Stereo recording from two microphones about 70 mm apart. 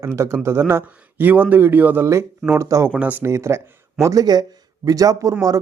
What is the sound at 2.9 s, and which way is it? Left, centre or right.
Speech, right.